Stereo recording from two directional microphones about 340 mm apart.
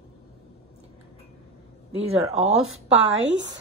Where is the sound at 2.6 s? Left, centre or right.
Right.